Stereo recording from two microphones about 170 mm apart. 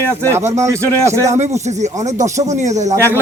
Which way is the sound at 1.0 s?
15° right (ahead or behind).